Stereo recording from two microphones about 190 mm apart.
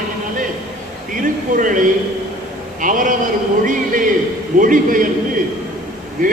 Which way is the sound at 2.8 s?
45° right (ahead or behind).